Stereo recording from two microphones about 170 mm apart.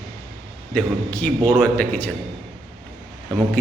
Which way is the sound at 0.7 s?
10° left (ahead or behind).